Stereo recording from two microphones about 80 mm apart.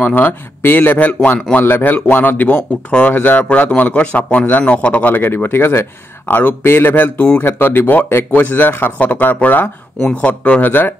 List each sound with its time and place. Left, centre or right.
0.0 s speech: left